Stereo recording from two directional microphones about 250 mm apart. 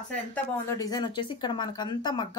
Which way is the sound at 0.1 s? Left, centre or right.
Centre.